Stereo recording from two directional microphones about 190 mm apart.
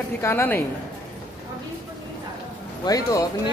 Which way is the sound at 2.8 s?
20° left (ahead or behind).